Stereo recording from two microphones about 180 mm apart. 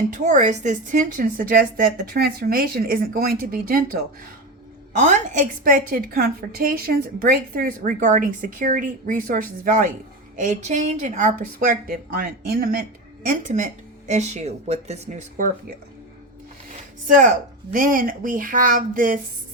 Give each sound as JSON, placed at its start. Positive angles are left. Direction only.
{"t": 0.1, "sound": "a woman's voice", "side_deg": -40}
{"t": 4.9, "sound": "a woman's voice", "side_deg": -45}
{"t": 13.2, "sound": "a woman's voice", "side_deg": -45}
{"t": 17.1, "sound": "a woman's voice", "side_deg": -50}